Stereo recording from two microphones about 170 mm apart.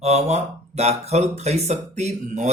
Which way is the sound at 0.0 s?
40° right (ahead or behind).